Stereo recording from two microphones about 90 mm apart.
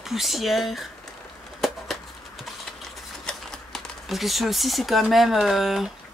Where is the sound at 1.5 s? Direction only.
Centre (ahead or behind).